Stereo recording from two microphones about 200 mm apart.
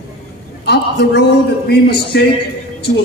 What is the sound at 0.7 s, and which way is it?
A man's voice, 55° left (ahead or behind).